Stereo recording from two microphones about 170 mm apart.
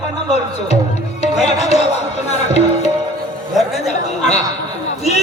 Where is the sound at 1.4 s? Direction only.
40° left (ahead or behind).